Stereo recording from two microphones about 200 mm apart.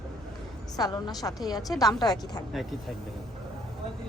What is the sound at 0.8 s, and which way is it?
A woman's voice, 20° left (ahead or behind).